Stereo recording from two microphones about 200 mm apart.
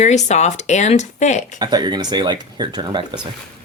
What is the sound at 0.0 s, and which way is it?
Speech, 35° left (ahead or behind).